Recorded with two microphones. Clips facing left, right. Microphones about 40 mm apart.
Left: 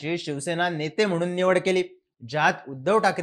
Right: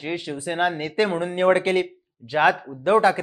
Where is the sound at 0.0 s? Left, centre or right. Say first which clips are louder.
Even; centre.